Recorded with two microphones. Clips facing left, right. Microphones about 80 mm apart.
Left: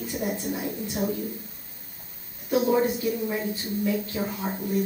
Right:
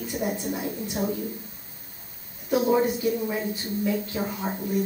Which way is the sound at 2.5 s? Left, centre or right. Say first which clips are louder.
Even; centre.